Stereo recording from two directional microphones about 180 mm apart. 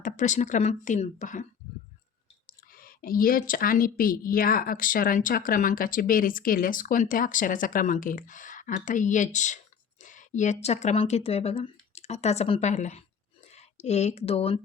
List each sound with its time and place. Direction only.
0.0 s speech: 45° left (ahead or behind)
2.5 s speech: 50° left (ahead or behind); by 14.6 s 35° left (ahead or behind)